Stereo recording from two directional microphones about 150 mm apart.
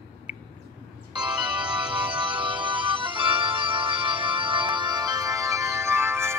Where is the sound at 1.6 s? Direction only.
5° right (ahead or behind).